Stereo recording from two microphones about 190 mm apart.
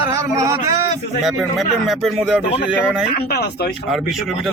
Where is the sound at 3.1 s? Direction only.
55° left (ahead or behind).